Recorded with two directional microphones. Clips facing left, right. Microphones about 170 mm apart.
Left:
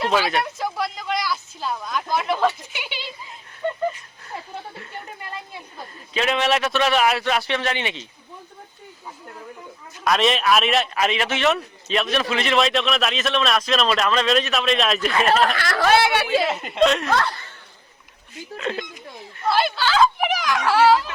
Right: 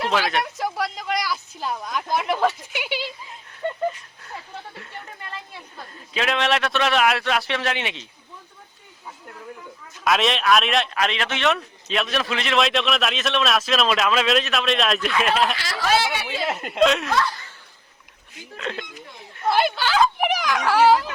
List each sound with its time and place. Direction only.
0.1 s speech: 10° left (ahead or behind)
0.6 s speech: 10° right (ahead or behind)
6.1 s a man's voice: centre (ahead or behind)
10.0 s a man's voice: centre (ahead or behind)
15.5 s speech: 55° left (ahead or behind)
16.5 s a man's voice: centre (ahead or behind)
17.1 s speech: 60° left (ahead or behind)
18.5 s a man's voice: 5° left (ahead or behind)
19.5 s speech: 15° right (ahead or behind)